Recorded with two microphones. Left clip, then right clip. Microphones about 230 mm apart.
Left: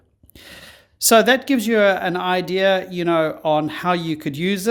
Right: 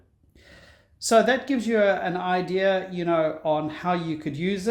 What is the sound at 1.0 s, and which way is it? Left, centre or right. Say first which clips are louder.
Speech: left 6 dB; left.